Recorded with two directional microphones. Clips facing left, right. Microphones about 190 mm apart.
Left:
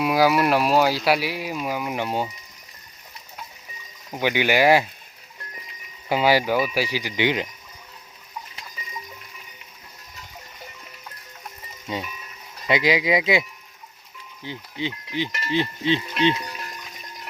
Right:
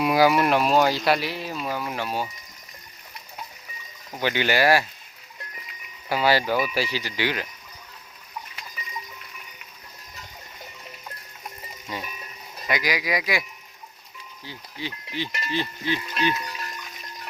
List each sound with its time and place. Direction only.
0.0 s speech: centre (ahead or behind); by 2.3 s 20° left (ahead or behind)
4.1 s speech: 15° left (ahead or behind)
6.1 s speech: 15° left (ahead or behind)
11.9 s speech: 25° left (ahead or behind)
14.4 s speech: 20° left (ahead or behind)